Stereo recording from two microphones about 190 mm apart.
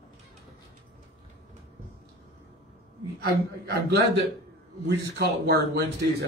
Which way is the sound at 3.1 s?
55° right (ahead or behind).